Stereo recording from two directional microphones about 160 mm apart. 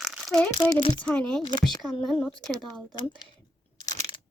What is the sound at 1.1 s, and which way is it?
A woman's voice, 5° left (ahead or behind).